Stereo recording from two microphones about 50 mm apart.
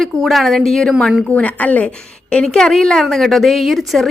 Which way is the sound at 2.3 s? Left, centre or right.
Centre.